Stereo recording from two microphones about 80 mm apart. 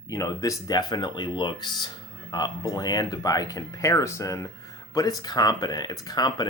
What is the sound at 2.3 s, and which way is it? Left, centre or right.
Speech, left.